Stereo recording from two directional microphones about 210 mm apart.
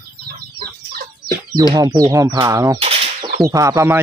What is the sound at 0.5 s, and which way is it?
Chicken, 45° right (ahead or behind).